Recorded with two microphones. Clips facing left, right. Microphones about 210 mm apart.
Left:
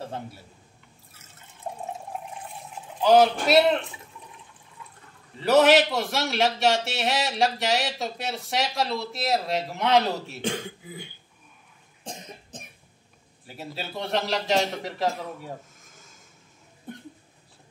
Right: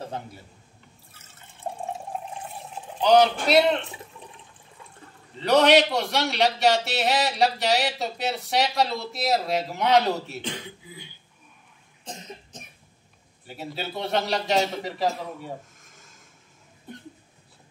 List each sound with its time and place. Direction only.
3.0 s a man's voice: centre (ahead or behind)
5.4 s a man's voice: 5° left (ahead or behind)
10.4 s speech: 50° left (ahead or behind)
13.5 s a man's voice: centre (ahead or behind)